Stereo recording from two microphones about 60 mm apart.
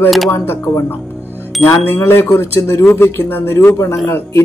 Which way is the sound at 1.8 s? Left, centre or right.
Left.